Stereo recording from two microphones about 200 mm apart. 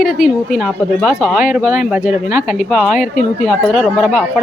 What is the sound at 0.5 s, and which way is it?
Speech, centre (ahead or behind).